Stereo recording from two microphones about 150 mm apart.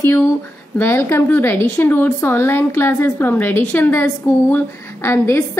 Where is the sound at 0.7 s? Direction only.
15° left (ahead or behind).